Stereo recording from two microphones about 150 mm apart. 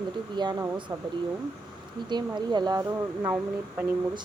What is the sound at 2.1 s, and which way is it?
Speech, 30° right (ahead or behind).